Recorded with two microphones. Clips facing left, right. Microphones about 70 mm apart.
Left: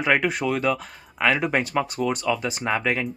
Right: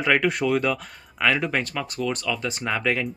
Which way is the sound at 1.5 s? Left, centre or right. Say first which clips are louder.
Left 4 dB; centre.